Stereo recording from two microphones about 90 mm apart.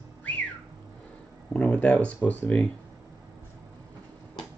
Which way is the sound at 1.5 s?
15° left (ahead or behind).